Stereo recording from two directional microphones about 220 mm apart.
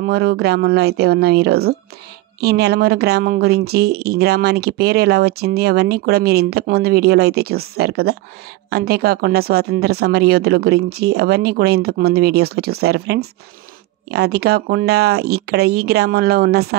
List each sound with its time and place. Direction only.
0.0 s speech: 45° right (ahead or behind)